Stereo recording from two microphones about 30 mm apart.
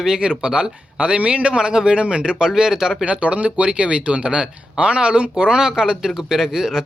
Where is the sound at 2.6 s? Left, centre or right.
Right.